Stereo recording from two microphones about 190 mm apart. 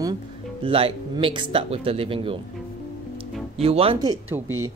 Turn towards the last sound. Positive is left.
turn(degrees=-20)  # may be behind; listen again after turning